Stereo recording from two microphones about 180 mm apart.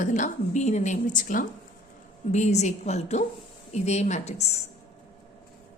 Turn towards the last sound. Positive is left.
turn(degrees=35)  # may be behind; listen again after turning